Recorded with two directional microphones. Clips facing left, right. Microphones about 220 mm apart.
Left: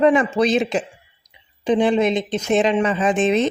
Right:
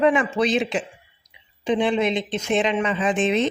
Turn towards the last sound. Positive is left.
turn(degrees=45)  # may be behind; listen again after turning